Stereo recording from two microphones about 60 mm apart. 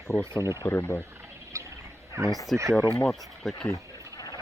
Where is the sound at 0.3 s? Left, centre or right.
Left.